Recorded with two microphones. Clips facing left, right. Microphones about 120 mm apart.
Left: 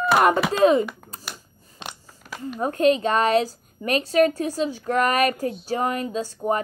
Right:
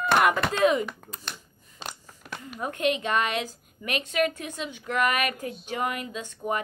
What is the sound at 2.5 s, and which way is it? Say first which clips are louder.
A woman's voice: left 8 dB; 35° left (ahead or behind).